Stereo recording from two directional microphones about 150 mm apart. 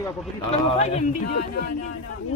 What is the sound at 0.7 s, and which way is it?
Speech, 45° left (ahead or behind).